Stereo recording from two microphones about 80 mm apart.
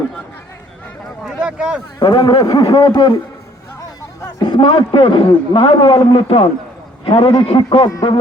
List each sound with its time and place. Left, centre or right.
1.5 s speech: centre
2.0 s a man's voice: left
3.8 s hubbub: left
4.4 s a man's voice: left